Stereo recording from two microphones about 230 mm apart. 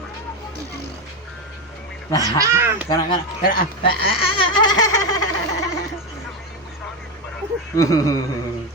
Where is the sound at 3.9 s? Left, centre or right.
Left.